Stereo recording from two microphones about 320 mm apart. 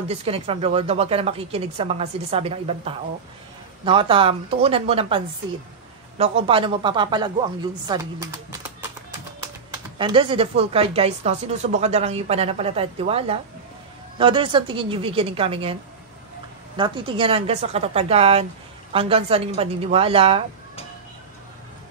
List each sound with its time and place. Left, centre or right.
0.1 s speech: centre
9.9 s speech: centre